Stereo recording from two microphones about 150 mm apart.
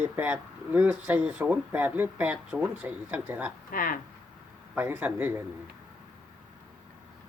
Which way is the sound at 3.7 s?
65° left (ahead or behind).